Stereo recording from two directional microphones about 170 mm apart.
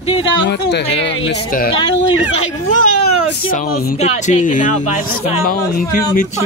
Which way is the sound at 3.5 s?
55° left (ahead or behind).